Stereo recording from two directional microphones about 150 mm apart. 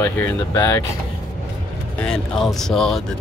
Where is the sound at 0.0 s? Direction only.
10° left (ahead or behind).